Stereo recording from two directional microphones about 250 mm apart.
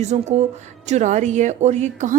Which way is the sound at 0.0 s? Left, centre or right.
Right.